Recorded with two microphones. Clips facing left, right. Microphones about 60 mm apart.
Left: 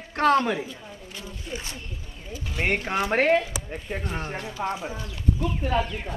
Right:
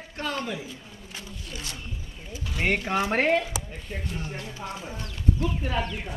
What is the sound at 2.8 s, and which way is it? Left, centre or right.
Speech, centre.